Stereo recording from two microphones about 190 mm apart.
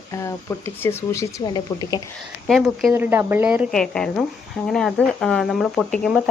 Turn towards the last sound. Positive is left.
turn(degrees=0)  # may be behind; listen again after turning